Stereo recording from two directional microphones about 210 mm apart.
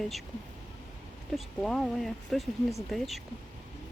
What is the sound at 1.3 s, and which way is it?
Speech, centre (ahead or behind).